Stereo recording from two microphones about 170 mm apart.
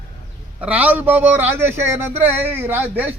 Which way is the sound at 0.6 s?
10° right (ahead or behind).